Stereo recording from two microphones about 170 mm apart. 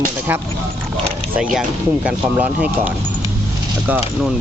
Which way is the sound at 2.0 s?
10° right (ahead or behind).